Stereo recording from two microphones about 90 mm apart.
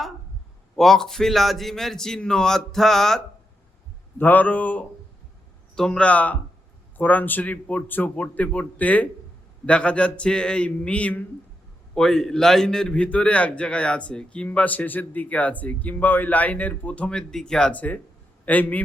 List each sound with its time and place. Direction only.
0.8 s a man's voice: 5° left (ahead or behind)
4.2 s a man's voice: 20° left (ahead or behind)
5.7 s a man's voice: 5° left (ahead or behind)
11.9 s a man's voice: 5° left (ahead or behind)